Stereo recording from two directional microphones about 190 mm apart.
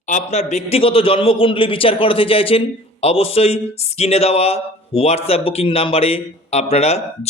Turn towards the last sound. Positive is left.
turn(degrees=35)  # may be behind; listen again after turning